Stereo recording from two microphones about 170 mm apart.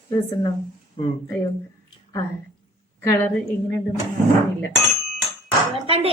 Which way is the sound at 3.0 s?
10° left (ahead or behind).